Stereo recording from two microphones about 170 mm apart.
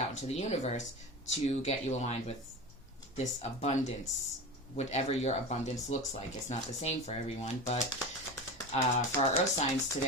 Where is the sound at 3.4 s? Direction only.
40° left (ahead or behind).